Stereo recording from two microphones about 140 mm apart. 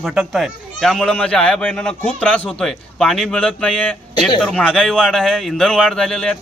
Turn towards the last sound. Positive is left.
turn(degrees=5)  # may be behind; listen again after turning